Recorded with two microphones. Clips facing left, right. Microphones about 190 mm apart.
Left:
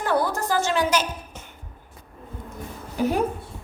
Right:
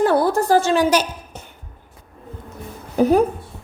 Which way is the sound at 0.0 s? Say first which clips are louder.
Right 7 dB; 30° right (ahead or behind).